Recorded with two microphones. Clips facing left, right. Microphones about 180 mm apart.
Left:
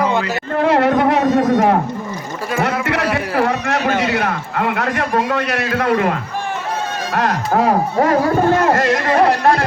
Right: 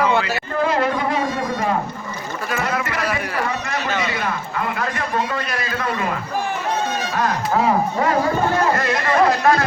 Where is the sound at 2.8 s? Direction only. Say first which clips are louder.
Left 5 dB; 70° left (ahead or behind).